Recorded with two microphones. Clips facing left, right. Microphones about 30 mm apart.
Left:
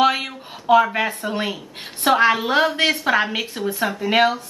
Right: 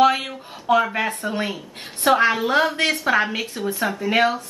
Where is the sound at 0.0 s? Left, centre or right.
Centre.